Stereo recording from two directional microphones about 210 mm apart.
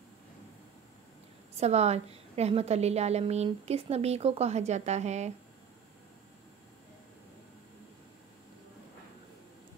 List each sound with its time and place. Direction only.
1.6 s a woman's voice: 30° right (ahead or behind)